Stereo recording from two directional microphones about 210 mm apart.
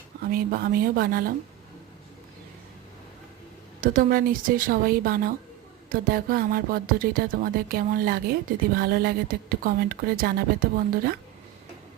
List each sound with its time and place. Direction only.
0.2 s speech: 45° right (ahead or behind)
3.8 s speech: 40° right (ahead or behind)